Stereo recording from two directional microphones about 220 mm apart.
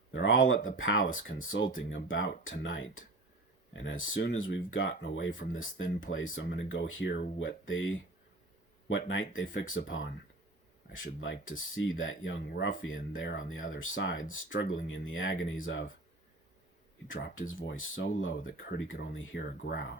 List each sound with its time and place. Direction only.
0.1 s speech: 60° left (ahead or behind)
4.0 s speech: 65° left (ahead or behind)
17.1 s speech: 55° left (ahead or behind)
17.5 s speech: 60° left (ahead or behind)